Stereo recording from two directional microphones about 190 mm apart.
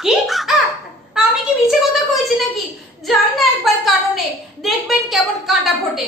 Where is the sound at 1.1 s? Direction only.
Centre (ahead or behind).